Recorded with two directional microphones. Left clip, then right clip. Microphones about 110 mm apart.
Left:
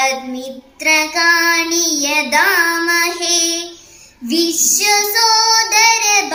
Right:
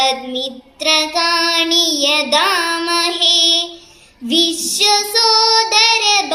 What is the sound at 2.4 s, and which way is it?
Music, 40° right (ahead or behind).